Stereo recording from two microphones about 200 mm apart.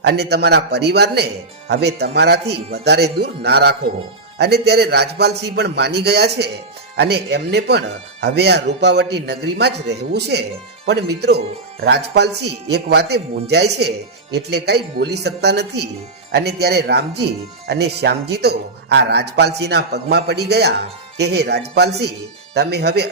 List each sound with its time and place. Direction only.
0.0 s speech: 55° right (ahead or behind)